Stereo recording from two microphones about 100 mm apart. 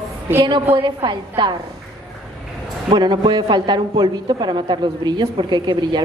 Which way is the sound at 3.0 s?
50° right (ahead or behind).